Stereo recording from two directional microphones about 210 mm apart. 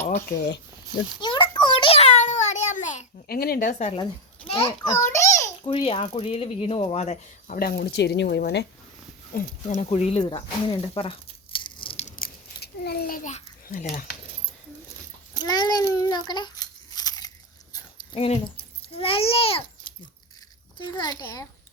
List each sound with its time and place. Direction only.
0.3 s speech: 55° left (ahead or behind)
1.2 s a sound: 20° left (ahead or behind)
4.4 s a child's voice: 25° left (ahead or behind)
5.6 s speech: 25° left (ahead or behind); by 8.6 s 50° left (ahead or behind)
9.3 s speech: 35° left (ahead or behind)
12.2 s babbling: 50° left (ahead or behind)
15.4 s a sound: 20° left (ahead or behind)
18.1 s a child's voice: 25° left (ahead or behind)